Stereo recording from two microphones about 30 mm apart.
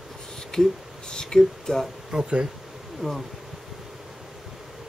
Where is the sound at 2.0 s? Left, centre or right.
Right.